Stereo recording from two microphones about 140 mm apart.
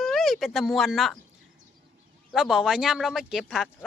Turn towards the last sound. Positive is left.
turn(degrees=-5)  # may be behind; listen again after turning